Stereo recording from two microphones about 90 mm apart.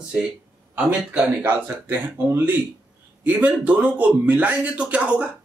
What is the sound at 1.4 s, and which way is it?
A man's voice, 25° right (ahead or behind).